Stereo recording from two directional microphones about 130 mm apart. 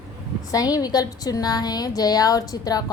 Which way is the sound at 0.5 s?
30° left (ahead or behind).